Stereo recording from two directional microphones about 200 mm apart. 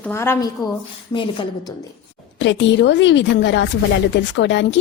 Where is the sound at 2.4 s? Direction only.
65° left (ahead or behind).